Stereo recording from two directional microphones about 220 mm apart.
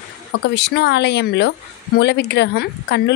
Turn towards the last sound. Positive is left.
turn(degrees=50)  # may be behind; listen again after turning